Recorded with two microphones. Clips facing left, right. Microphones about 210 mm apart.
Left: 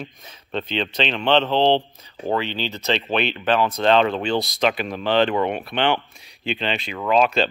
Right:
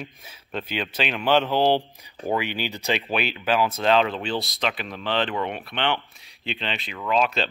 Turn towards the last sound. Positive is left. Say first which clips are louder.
# left 5 dB
turn(degrees=0)  # may be behind; listen again after turning